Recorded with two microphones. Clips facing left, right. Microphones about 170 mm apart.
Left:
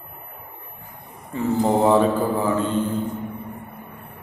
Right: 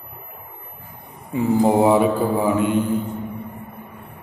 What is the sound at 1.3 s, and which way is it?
A man's voice, 15° right (ahead or behind).